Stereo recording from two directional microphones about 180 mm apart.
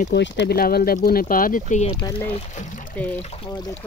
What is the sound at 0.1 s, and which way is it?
Speech, 70° left (ahead or behind).